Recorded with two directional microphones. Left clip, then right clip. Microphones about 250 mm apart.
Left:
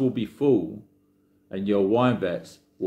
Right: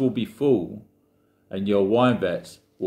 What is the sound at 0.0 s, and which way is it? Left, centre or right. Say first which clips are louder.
Speech: right 1 dB; centre.